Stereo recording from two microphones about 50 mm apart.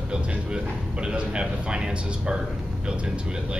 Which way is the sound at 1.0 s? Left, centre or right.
Centre.